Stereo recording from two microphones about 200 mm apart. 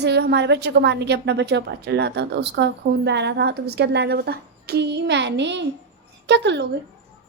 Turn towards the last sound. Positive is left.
turn(degrees=-60)  # may be behind; listen again after turning